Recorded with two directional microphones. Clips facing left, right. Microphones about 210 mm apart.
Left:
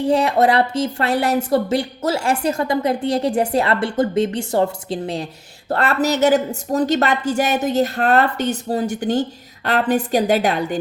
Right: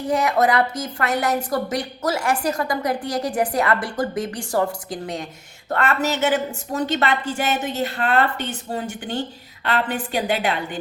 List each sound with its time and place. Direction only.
0.0 s a woman's voice: 30° left (ahead or behind)